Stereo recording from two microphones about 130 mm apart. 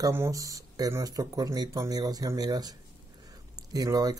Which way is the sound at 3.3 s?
30° right (ahead or behind).